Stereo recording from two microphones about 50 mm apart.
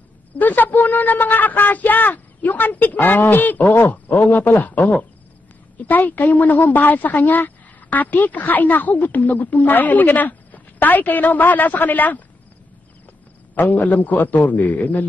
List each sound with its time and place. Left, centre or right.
0.4 s a woman's voice: left
13.6 s a woman's voice: left